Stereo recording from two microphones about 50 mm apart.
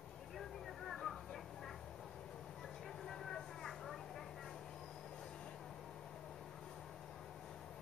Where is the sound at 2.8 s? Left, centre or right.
Centre.